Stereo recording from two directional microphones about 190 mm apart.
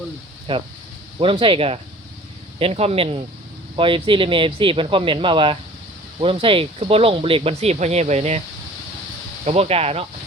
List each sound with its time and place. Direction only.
0.5 s speech: 25° right (ahead or behind)
9.4 s speech: 35° right (ahead or behind)